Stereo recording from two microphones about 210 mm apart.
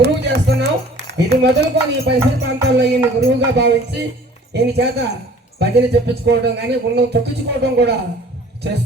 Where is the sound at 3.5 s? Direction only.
55° right (ahead or behind).